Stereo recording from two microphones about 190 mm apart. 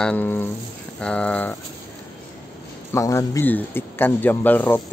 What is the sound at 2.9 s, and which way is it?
Speech, 15° left (ahead or behind).